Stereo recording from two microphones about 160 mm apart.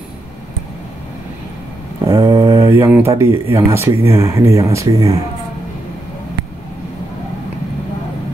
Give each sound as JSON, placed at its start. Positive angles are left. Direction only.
{"t": 2.0, "sound": "mantra", "side_deg": -25}
{"t": 2.7, "sound": "speech", "side_deg": -15}